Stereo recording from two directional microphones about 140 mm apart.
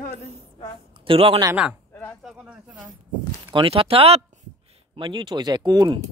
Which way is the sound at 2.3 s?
10° right (ahead or behind).